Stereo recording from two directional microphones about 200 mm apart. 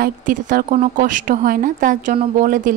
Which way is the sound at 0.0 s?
45° right (ahead or behind).